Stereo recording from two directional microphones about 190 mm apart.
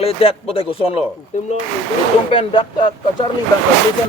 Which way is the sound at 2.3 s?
25° left (ahead or behind).